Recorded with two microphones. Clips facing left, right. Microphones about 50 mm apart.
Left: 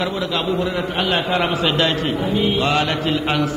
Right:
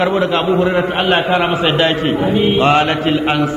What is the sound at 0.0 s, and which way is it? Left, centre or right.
A man's voice, right.